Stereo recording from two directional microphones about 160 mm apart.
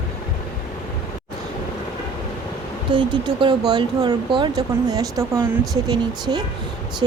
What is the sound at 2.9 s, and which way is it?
Speech, 30° right (ahead or behind).